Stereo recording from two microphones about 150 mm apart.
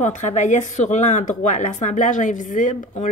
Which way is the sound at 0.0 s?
50° left (ahead or behind).